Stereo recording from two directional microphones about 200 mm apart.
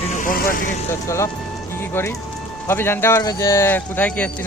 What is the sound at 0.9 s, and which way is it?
Speech, 15° left (ahead or behind).